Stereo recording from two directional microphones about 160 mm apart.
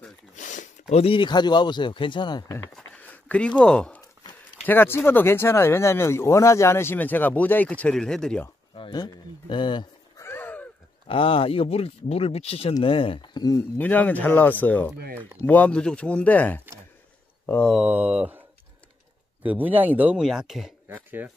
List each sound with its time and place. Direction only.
0.4 s speech: 50° left (ahead or behind); by 2.6 s 25° left (ahead or behind)
2.7 s speech: 10° left (ahead or behind)
8.7 s speech: 30° left (ahead or behind)
10.2 s a sound: 15° left (ahead or behind)
11.1 s speech: 35° left (ahead or behind)
13.7 s speech: 10° left (ahead or behind)
17.7 s speech: 5° right (ahead or behind)
19.4 s speech: 10° right (ahead or behind)